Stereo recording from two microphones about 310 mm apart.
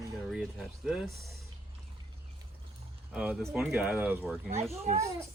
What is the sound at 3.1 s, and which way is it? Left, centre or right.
Speech, centre.